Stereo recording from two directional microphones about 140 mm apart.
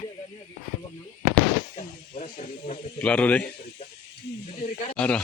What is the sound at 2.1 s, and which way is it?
Snake, 55° left (ahead or behind).